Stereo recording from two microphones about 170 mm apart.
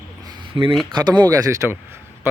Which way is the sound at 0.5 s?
30° right (ahead or behind).